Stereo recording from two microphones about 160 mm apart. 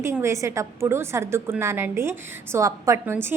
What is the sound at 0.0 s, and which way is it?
A woman's voice, 15° right (ahead or behind).